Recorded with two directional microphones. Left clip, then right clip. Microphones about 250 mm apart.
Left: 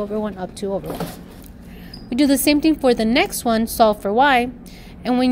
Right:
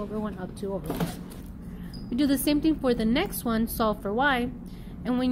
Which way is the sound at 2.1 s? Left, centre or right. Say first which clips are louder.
Left 9 dB; left.